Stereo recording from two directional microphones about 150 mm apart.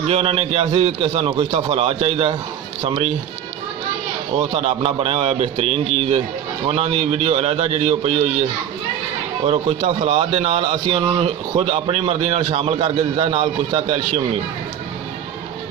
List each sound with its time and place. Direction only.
0.0 s a man's voice: 45° right (ahead or behind)
4.4 s a man's voice: 45° right (ahead or behind)